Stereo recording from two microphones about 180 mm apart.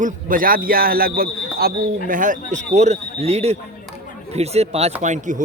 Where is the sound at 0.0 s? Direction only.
50° right (ahead or behind).